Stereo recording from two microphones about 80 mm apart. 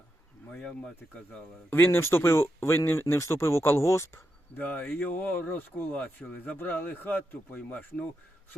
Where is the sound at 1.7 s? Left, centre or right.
Left.